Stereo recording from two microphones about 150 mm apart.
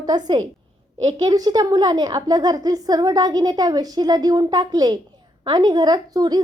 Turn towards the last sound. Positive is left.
turn(degrees=-25)  # may be behind; listen again after turning